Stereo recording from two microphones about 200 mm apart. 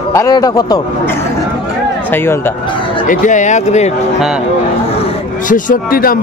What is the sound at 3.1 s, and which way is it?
Speech, 40° left (ahead or behind).